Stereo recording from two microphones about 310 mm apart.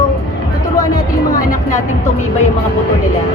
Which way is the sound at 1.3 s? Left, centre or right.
Left.